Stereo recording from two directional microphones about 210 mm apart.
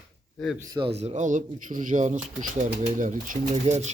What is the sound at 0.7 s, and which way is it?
Speech, 25° right (ahead or behind).